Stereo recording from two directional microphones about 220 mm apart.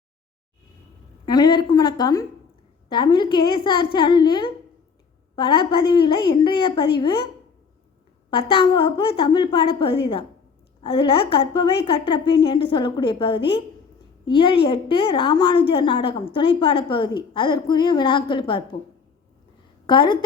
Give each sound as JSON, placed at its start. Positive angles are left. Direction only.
{"t": 1.2, "sound": "a woman's voice", "side_deg": 20}
{"t": 8.5, "sound": "a woman's voice", "side_deg": 25}
{"t": 19.9, "sound": "a woman's voice", "side_deg": 20}